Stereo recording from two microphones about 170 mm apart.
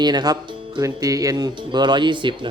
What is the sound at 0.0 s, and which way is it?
Speech, 25° right (ahead or behind).